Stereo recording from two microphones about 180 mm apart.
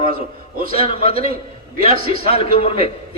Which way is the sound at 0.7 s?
30° left (ahead or behind).